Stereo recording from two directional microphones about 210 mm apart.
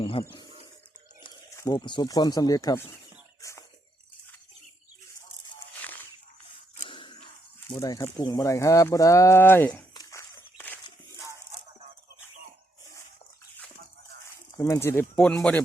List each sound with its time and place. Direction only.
0.0 s speech: 25° left (ahead or behind)
1.5 s speech: 20° left (ahead or behind)
6.7 s a sound: 25° left (ahead or behind)
7.7 s speech: 15° left (ahead or behind)
9.9 s a sound: 15° left (ahead or behind)
14.5 s speech: 15° left (ahead or behind)